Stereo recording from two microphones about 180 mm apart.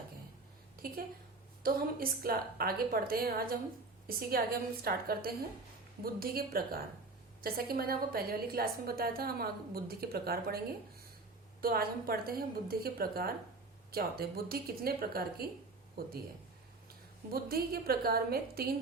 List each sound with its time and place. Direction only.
1.6 s a woman's voice: 55° right (ahead or behind)
11.6 s a woman's voice: 55° right (ahead or behind)
17.3 s a woman's voice: 55° right (ahead or behind)